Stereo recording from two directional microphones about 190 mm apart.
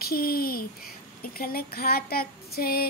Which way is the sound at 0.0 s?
50° left (ahead or behind).